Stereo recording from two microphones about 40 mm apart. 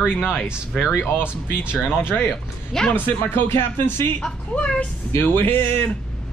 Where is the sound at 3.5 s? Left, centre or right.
Left.